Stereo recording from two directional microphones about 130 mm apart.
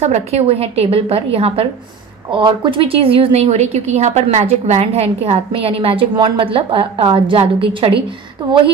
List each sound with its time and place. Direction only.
0.0 s a woman's voice: 55° right (ahead or behind)